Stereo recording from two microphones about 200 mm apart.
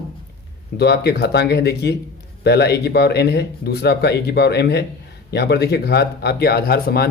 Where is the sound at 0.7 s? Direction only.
55° left (ahead or behind).